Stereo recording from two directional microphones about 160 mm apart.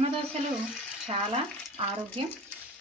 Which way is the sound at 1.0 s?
40° right (ahead or behind).